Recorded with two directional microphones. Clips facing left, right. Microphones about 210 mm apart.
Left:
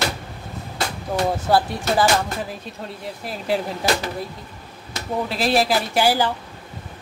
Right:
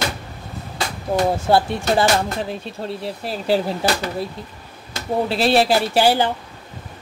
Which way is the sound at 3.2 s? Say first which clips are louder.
Right 4 dB; 30° right (ahead or behind).